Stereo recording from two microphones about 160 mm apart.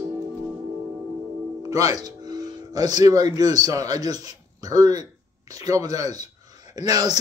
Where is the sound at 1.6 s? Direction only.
20° right (ahead or behind).